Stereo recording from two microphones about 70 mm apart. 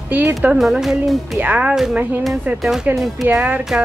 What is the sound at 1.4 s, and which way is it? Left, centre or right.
Speech, right.